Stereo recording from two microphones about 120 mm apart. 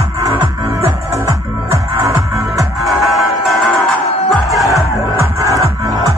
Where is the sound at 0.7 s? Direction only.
25° right (ahead or behind).